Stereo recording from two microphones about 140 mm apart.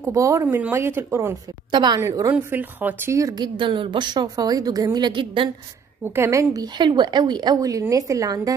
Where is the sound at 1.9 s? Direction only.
20° right (ahead or behind).